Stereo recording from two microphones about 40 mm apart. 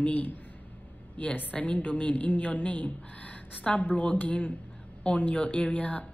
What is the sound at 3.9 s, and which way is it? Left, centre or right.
Speech, left.